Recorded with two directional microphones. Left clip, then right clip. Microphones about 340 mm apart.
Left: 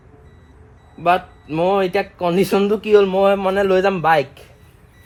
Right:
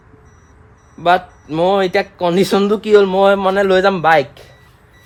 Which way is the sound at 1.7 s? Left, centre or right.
Right.